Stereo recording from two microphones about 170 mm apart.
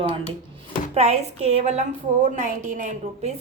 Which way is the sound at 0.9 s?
40° right (ahead or behind).